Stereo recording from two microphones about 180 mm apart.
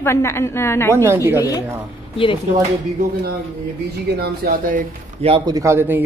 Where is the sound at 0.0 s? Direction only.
15° left (ahead or behind).